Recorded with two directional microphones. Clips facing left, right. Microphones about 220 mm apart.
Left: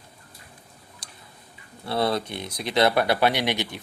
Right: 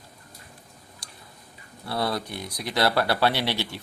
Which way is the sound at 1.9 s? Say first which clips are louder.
Left 3 dB; 25° left (ahead or behind).